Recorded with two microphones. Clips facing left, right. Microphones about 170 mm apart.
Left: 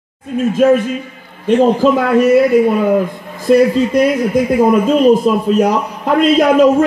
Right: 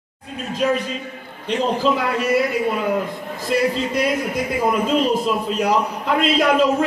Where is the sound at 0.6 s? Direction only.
50° left (ahead or behind).